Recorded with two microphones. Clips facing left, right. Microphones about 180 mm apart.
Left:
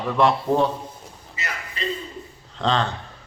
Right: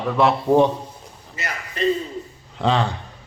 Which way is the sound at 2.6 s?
10° right (ahead or behind).